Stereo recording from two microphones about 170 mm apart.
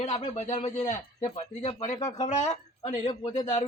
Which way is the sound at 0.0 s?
40° left (ahead or behind).